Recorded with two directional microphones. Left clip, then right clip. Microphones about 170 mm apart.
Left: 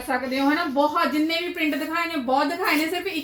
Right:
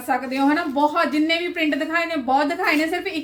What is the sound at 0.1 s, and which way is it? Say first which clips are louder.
A woman's voice: right 3 dB; 20° right (ahead or behind).